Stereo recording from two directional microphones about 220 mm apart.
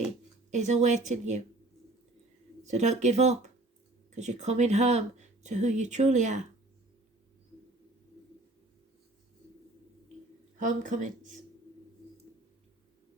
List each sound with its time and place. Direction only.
0.5 s speech: 30° right (ahead or behind)
2.6 s speech: 30° right (ahead or behind)
10.6 s speech: 35° right (ahead or behind)